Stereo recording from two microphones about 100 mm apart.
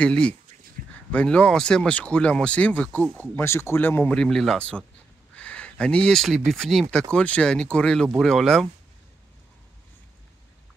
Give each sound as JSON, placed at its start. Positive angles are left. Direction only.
{"t": 0.0, "sound": "speech", "side_deg": 10}
{"t": 4.2, "sound": "speech", "side_deg": 5}